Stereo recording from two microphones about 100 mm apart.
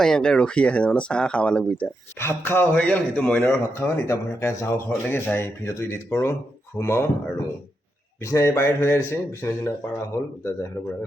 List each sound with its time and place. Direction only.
0.0 s speech: 5° left (ahead or behind)
2.1 s speech: 25° left (ahead or behind)
2.7 s speech: 10° left (ahead or behind)
3.8 s speech: 25° left (ahead or behind)
8.2 s speech: 30° left (ahead or behind)